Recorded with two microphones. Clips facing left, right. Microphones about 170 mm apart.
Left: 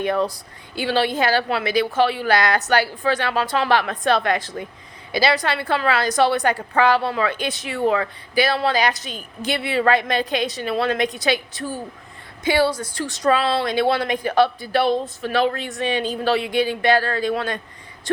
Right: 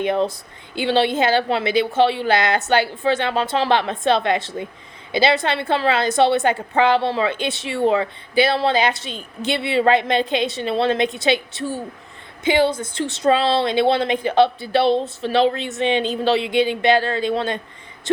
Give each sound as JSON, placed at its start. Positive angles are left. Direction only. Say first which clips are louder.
{"t": 0.0, "sound": "speech", "louder": "right 1 dB", "side_deg": -25}